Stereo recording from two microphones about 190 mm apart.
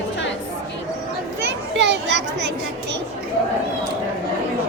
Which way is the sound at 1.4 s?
65° right (ahead or behind).